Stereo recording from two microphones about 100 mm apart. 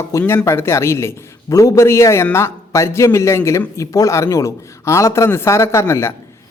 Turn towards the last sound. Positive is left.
turn(degrees=25)  # may be behind; listen again after turning